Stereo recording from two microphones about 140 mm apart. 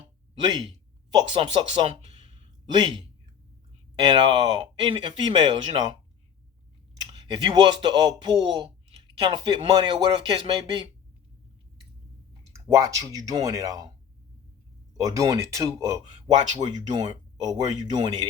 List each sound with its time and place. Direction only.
1.1 s speech: 35° right (ahead or behind)
4.0 s speech: 35° right (ahead or behind)
12.5 s speech: 20° right (ahead or behind)
14.9 s speech: 25° right (ahead or behind)